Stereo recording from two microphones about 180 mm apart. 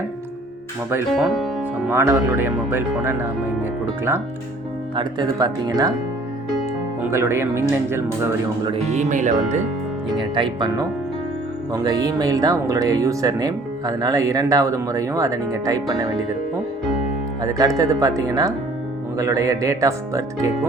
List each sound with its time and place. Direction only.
1.1 s speech: centre (ahead or behind)
1.9 s speech: 15° right (ahead or behind)
7.0 s speech: 15° right (ahead or behind)
8.6 s speech: 35° right (ahead or behind)
10.3 s speech: 25° right (ahead or behind)
17.4 s speech: 20° right (ahead or behind)